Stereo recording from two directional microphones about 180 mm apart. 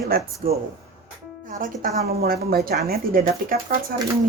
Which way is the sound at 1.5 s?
50° right (ahead or behind).